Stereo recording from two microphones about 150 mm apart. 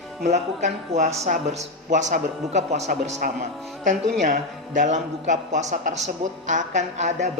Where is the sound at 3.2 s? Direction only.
70° right (ahead or behind).